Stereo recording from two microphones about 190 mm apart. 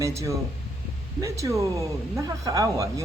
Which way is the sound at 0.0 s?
15° right (ahead or behind).